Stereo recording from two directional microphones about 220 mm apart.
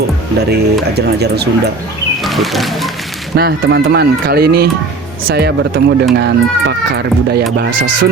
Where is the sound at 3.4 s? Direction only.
50° right (ahead or behind).